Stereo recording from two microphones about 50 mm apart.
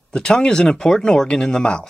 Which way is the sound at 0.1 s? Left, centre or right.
Centre.